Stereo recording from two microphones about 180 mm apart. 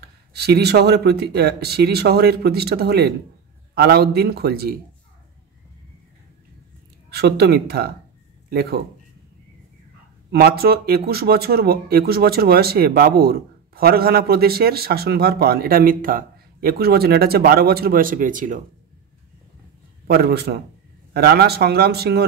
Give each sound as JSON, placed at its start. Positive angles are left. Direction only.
{"t": 0.3, "sound": "speech", "side_deg": -65}
{"t": 7.1, "sound": "speech", "side_deg": -65}
{"t": 10.3, "sound": "speech", "side_deg": -60}
{"t": 20.1, "sound": "speech", "side_deg": -60}